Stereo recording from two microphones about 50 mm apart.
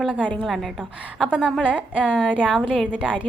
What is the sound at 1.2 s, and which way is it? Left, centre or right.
A woman's voice, right.